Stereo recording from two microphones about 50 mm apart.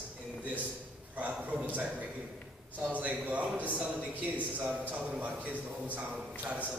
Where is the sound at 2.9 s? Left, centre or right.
Right.